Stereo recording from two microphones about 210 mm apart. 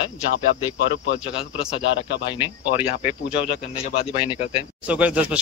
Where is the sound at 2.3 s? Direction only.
20° left (ahead or behind).